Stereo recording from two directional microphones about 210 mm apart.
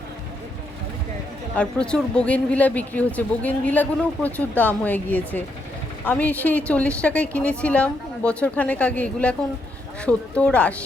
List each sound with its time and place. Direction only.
1.5 s speech: 5° left (ahead or behind)